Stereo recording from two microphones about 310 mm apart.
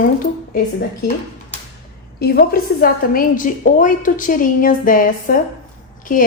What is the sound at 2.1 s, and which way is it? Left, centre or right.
A woman's voice, left.